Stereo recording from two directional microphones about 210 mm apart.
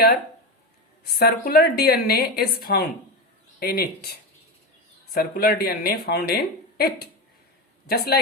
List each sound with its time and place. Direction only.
1.2 s speech: 45° left (ahead or behind)
5.1 s speech: 45° left (ahead or behind)